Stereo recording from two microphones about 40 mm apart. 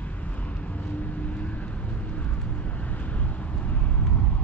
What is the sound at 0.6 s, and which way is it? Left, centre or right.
Vehicle, left.